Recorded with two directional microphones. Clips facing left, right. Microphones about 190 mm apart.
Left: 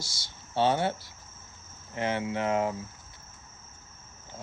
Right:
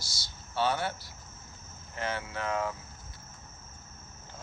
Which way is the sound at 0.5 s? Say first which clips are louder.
Left 4 dB; 25° left (ahead or behind).